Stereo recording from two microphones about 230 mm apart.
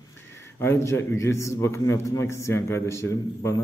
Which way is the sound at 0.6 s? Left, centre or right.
Centre.